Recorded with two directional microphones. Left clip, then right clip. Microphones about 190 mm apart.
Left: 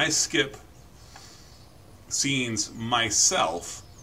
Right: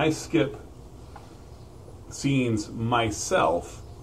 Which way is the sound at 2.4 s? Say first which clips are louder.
Right 2 dB; 10° left (ahead or behind).